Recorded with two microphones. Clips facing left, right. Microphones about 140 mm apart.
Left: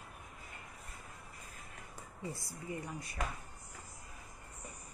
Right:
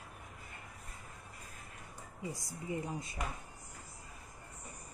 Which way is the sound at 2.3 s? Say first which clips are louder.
Right 5 dB; 15° right (ahead or behind).